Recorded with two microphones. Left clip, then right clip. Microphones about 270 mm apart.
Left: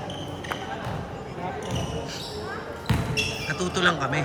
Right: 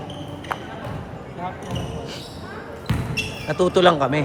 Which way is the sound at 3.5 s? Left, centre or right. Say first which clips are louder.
Right 10 dB; centre.